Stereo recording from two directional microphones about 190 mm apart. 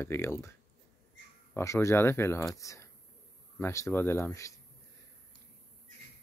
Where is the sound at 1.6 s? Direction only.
15° left (ahead or behind).